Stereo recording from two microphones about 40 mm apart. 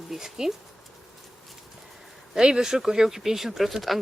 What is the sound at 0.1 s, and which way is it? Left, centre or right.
Speech, centre.